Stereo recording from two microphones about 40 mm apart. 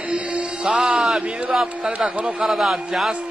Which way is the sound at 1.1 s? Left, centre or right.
Right.